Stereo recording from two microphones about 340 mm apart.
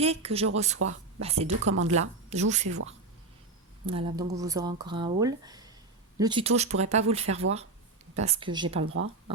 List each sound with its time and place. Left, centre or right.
0.0 s speech: centre
1.7 s speech: right
2.0 s speech: centre
3.8 s speech: centre
8.8 s speech: right